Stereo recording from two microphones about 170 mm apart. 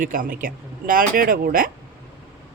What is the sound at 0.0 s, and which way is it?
Speech, 55° right (ahead or behind).